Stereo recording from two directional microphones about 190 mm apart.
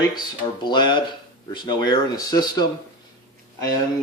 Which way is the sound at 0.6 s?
25° left (ahead or behind).